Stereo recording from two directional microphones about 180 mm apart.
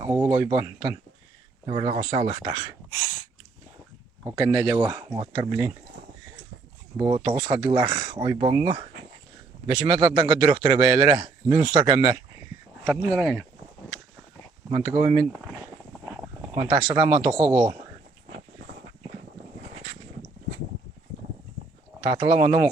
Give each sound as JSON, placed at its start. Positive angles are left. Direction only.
{"t": 0.0, "sound": "speech", "side_deg": -10}
{"t": 4.2, "sound": "speech", "side_deg": -15}
{"t": 6.9, "sound": "speech", "side_deg": -25}
{"t": 7.5, "sound": "speech", "side_deg": -15}
{"t": 13.1, "sound": "speech", "side_deg": 0}
{"t": 14.7, "sound": "speech", "side_deg": -20}
{"t": 16.6, "sound": "speech", "side_deg": -20}
{"t": 22.0, "sound": "speech", "side_deg": -25}